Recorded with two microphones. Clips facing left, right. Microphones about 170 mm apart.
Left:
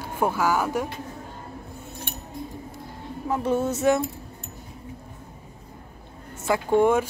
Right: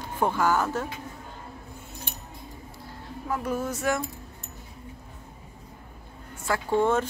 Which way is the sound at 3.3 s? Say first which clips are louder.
Left 5 dB; 25° left (ahead or behind).